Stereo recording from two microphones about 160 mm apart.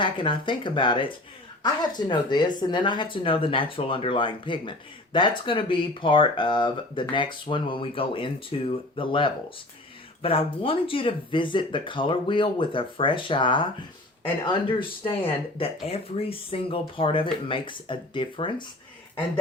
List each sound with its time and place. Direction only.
0.0 s speech: 30° left (ahead or behind)